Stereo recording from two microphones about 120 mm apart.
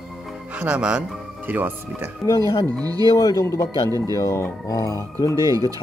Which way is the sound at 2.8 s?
30° right (ahead or behind).